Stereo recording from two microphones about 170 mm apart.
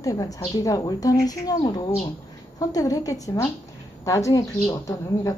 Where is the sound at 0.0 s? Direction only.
20° left (ahead or behind).